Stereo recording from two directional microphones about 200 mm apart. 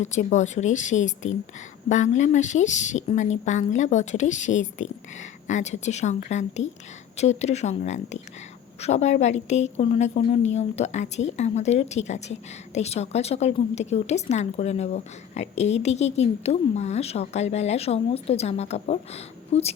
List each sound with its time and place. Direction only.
0.0 s a woman's voice: 35° left (ahead or behind)